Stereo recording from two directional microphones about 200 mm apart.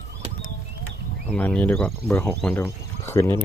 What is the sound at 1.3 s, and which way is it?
Speech, 10° left (ahead or behind).